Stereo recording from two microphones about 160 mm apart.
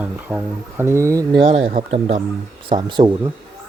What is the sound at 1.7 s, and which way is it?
Speech, 45° right (ahead or behind).